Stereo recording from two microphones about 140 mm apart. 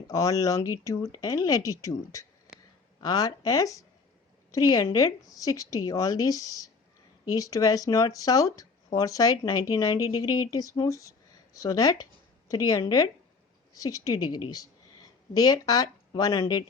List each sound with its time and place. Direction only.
0.1 s speech: 25° left (ahead or behind)